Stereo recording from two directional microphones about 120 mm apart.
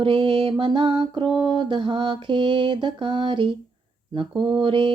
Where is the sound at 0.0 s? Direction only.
45° right (ahead or behind).